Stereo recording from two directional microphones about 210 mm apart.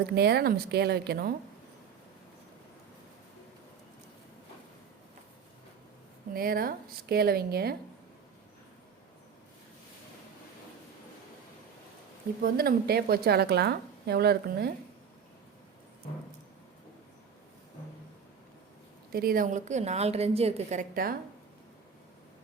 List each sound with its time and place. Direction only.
0.1 s a woman's voice: 50° right (ahead or behind)
6.3 s a woman's voice: 45° right (ahead or behind)
12.4 s a woman's voice: 45° right (ahead or behind)
19.1 s a woman's voice: 45° right (ahead or behind)